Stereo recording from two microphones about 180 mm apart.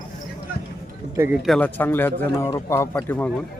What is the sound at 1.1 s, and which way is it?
Speech, 15° right (ahead or behind).